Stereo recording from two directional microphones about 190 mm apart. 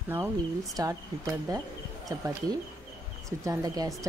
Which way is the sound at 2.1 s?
15° right (ahead or behind).